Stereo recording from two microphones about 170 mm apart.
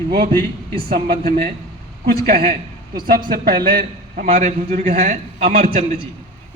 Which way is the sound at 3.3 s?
60° right (ahead or behind).